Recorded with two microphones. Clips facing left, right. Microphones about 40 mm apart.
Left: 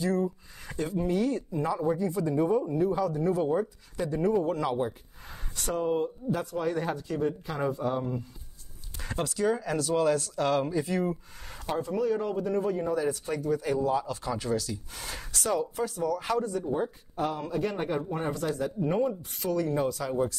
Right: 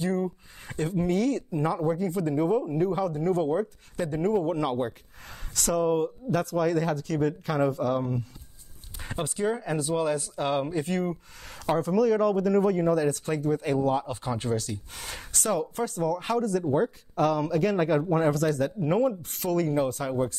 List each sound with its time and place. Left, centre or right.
0.0 s speech: right
5.5 s speech: right
6.3 s speech: right
9.0 s speech: right
10.7 s speech: right
11.8 s speech: right
14.0 s speech: right
15.6 s speech: right
16.3 s speech: right
16.7 s speech: right
18.9 s speech: right